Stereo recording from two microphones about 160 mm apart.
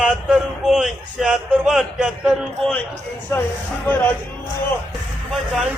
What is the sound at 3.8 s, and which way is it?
Speech, 10° left (ahead or behind).